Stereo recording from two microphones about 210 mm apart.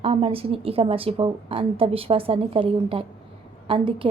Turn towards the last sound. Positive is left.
turn(degrees=-25)  # may be behind; listen again after turning